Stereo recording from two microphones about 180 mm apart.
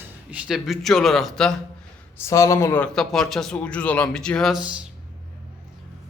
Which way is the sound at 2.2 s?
15° left (ahead or behind).